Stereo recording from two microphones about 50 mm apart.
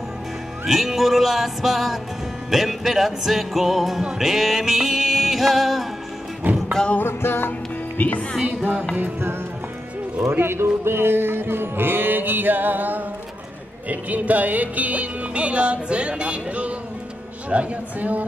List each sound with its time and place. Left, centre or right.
0.7 s music: centre
6.5 s music: right
7.0 s music: left
8.0 s speech: left
10.3 s speech: right
13.8 s music: right